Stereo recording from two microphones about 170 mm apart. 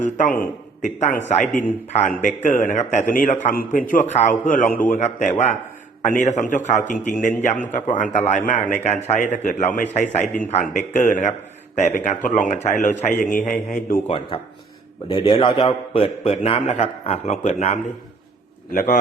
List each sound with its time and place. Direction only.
0.3 s a man's voice: 50° left (ahead or behind)
14.1 s a man's voice: 30° left (ahead or behind)
18.7 s a man's voice: 55° left (ahead or behind)